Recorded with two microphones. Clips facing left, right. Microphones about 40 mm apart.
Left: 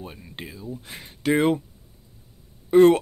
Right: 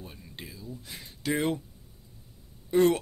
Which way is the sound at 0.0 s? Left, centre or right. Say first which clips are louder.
Left 6 dB; left.